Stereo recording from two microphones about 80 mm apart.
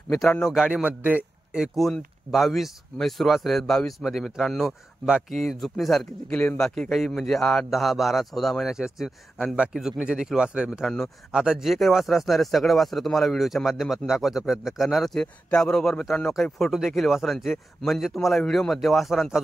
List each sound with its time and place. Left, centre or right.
0.5 s speech: centre
0.8 s speech: centre
1.8 s speech: centre
10.7 s speech: centre